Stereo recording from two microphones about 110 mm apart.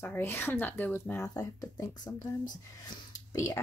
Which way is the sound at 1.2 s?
30° left (ahead or behind).